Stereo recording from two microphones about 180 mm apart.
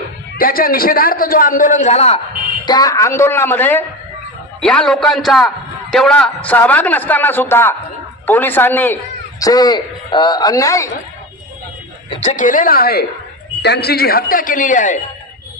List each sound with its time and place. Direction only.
0.3 s a man's voice: 55° left (ahead or behind); by 2.2 s 35° left (ahead or behind)
2.6 s a man's voice: 20° left (ahead or behind)
9.4 s a man's voice: 20° left (ahead or behind)
12.2 s a man's voice: 45° left (ahead or behind)